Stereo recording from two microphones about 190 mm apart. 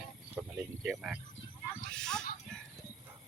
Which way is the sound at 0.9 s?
5° right (ahead or behind).